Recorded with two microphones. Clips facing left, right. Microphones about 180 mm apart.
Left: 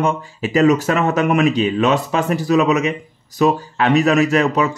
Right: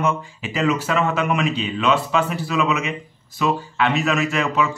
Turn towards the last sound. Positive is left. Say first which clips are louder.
# left 6 dB
turn(degrees=40)  # may be behind; listen again after turning